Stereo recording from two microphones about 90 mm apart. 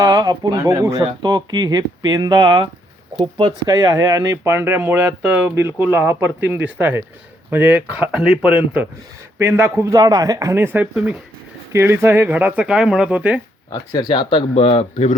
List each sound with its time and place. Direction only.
0.0 s speech: 45° right (ahead or behind)
1.2 s speech: 50° right (ahead or behind)
3.7 s speech: 45° right (ahead or behind); by 8.9 s 15° right (ahead or behind)
9.4 s speech: 30° right (ahead or behind)
9.9 s speech: 45° right (ahead or behind); by 11.2 s 15° right (ahead or behind)
11.7 s speech: 30° right (ahead or behind)
13.7 s speech: 40° left (ahead or behind)
14.1 s speech: 65° left (ahead or behind); by 14.8 s 90° left